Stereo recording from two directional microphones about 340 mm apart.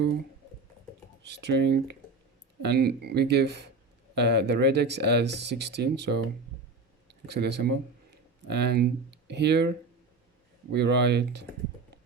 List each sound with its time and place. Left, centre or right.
1.3 s speech: right
10.8 s speech: right